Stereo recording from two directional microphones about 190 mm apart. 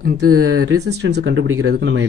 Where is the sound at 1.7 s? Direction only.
70° right (ahead or behind).